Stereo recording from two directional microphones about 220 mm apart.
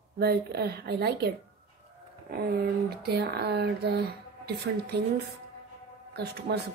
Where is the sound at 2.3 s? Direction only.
45° right (ahead or behind).